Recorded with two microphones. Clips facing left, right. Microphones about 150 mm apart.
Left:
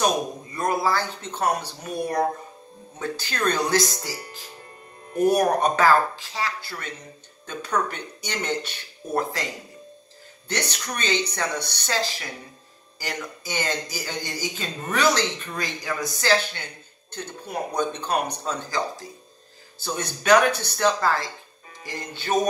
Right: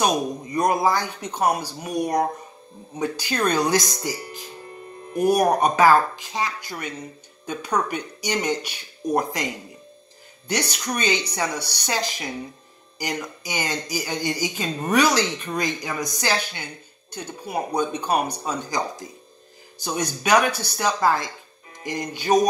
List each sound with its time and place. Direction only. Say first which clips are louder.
0.5 s speech: right 4 dB; 15° right (ahead or behind)
10.5 s speech: right 3 dB; 10° right (ahead or behind)